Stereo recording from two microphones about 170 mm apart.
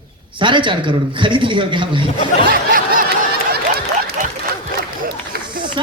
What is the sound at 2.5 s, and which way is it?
Snicker, 55° right (ahead or behind).